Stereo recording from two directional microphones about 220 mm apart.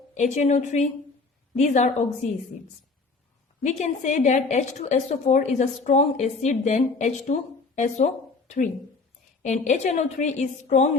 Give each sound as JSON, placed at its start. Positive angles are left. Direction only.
{"t": 0.1, "sound": "a woman's voice", "side_deg": 35}
{"t": 3.6, "sound": "a woman's voice", "side_deg": 35}